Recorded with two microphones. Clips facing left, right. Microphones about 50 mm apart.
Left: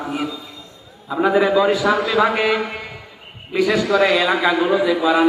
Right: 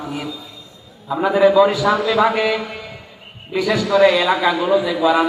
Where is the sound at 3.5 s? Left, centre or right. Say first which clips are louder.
Even; centre.